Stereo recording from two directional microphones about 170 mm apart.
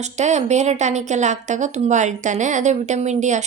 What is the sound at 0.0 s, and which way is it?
Speech, 40° right (ahead or behind).